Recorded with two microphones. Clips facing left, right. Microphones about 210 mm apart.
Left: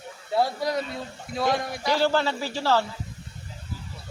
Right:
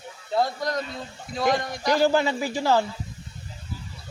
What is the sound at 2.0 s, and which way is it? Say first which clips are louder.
Speech: right 3 dB; 10° right (ahead or behind).